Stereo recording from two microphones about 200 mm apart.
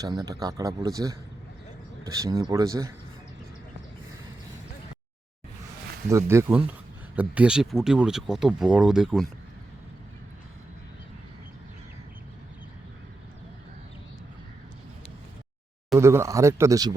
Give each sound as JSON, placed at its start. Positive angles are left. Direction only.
{"t": 0.0, "sound": "speech", "side_deg": -20}
{"t": 2.0, "sound": "speech", "side_deg": -15}
{"t": 6.1, "sound": "speech", "side_deg": -15}
{"t": 16.0, "sound": "speech", "side_deg": -15}